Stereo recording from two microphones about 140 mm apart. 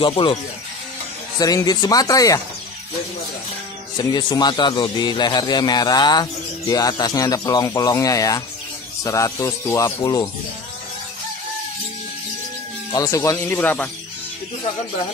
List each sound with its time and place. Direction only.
0.0 s speech: 35° left (ahead or behind)
1.4 s speech: 25° left (ahead or behind)
4.0 s speech: 30° left (ahead or behind)
12.9 s speech: 25° left (ahead or behind)